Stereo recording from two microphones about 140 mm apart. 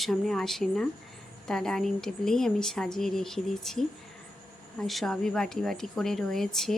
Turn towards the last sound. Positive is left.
turn(degrees=0)  # may be behind; listen again after turning